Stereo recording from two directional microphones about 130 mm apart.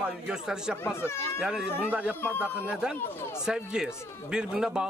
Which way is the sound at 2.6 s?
10° right (ahead or behind).